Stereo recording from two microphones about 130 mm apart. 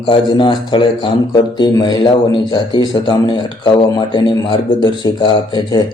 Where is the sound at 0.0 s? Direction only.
40° left (ahead or behind).